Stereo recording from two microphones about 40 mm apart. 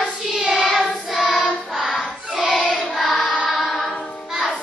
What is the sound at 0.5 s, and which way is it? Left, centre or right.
Choir, centre.